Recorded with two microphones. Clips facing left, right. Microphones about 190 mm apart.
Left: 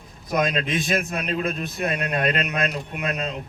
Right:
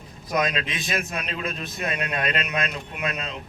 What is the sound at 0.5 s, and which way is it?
Speech, 50° left (ahead or behind).